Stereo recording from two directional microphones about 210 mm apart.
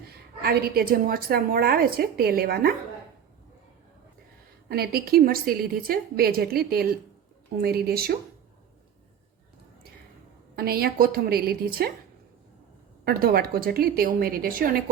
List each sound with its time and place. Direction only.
0.4 s a woman's voice: 45° right (ahead or behind)
4.7 s a woman's voice: 50° right (ahead or behind)
10.5 s a woman's voice: 45° right (ahead or behind)
13.1 s a woman's voice: 45° right (ahead or behind)